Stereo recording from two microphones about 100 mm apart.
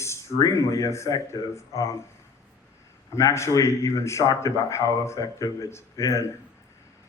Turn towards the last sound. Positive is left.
turn(degrees=30)  # may be behind; listen again after turning